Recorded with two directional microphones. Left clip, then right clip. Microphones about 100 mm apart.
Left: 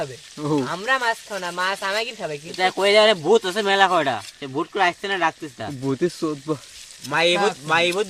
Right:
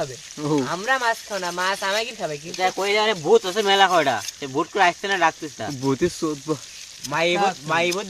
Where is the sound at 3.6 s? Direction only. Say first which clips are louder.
Right 1 dB; 5° right (ahead or behind).